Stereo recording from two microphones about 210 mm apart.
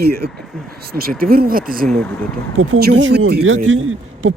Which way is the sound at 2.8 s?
55° right (ahead or behind).